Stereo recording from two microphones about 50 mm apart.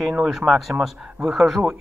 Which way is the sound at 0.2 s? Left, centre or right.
Centre.